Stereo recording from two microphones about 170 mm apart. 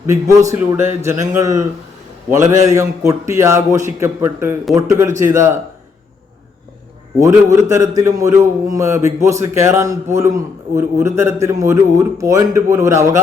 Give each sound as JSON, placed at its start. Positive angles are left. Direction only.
{"t": 0.1, "sound": "a man's voice", "side_deg": -20}
{"t": 7.2, "sound": "a man's voice", "side_deg": -20}